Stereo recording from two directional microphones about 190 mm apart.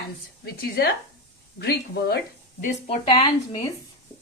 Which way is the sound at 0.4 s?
55° left (ahead or behind).